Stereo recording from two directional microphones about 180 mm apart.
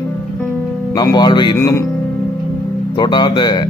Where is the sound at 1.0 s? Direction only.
25° left (ahead or behind).